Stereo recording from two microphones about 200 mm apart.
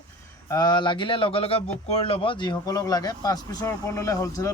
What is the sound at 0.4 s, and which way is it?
Speech, 20° left (ahead or behind).